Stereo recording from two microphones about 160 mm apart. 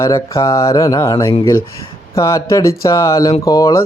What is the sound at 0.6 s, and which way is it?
Speech, 20° left (ahead or behind).